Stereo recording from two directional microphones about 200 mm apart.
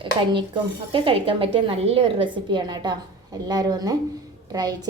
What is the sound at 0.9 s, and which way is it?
A woman's voice, 25° right (ahead or behind).